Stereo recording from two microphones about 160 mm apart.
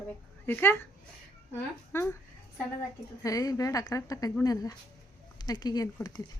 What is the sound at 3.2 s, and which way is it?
Speech, 20° left (ahead or behind).